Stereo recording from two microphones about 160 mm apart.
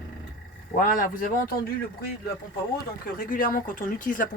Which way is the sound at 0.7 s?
60° left (ahead or behind).